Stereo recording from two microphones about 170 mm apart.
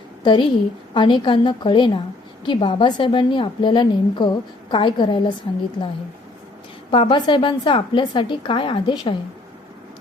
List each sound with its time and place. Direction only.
0.2 s a woman's voice: 30° left (ahead or behind)
6.9 s a woman's voice: 30° left (ahead or behind)